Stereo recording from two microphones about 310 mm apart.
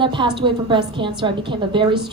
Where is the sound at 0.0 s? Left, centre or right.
Centre.